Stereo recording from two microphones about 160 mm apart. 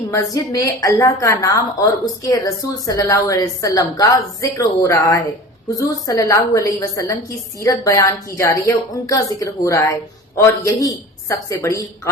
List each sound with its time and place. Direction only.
0.1 s a woman's voice: 20° left (ahead or behind)